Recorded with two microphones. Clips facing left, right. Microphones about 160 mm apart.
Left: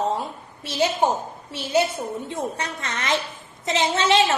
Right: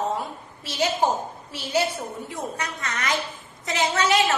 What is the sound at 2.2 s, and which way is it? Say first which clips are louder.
A woman's voice: left 3 dB; 25° left (ahead or behind).